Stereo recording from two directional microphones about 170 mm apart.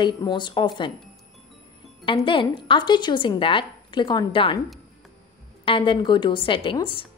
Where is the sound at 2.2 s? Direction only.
30° left (ahead or behind).